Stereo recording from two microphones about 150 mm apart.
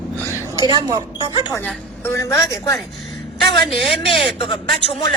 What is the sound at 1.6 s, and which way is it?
A woman's voice, 15° left (ahead or behind).